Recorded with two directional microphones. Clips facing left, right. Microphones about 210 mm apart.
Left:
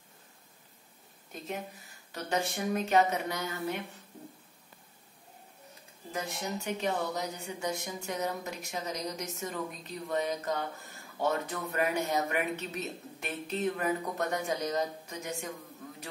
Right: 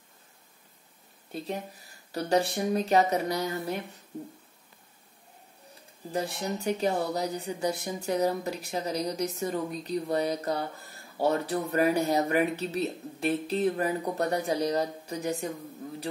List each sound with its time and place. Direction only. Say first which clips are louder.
1.3 s speech: right 4 dB; 30° right (ahead or behind)
6.1 s speech: right 5 dB; 35° right (ahead or behind)